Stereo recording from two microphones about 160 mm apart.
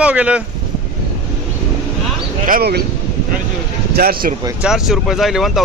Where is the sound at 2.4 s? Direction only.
70° right (ahead or behind).